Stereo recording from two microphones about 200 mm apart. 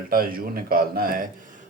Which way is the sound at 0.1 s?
45° right (ahead or behind).